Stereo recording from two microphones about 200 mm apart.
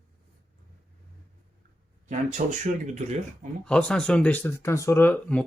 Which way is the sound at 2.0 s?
40° right (ahead or behind).